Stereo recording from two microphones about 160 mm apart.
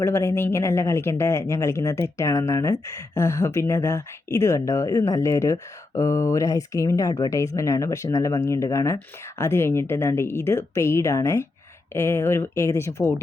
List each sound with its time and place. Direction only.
0.0 s a woman's voice: 15° left (ahead or behind)